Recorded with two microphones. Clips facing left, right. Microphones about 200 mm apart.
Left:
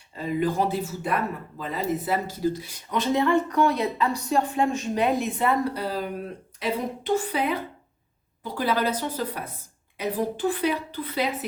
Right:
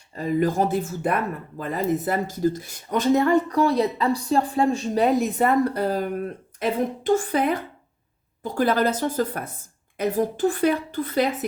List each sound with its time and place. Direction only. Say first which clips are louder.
0.2 s speech: right 3 dB; 45° right (ahead or behind)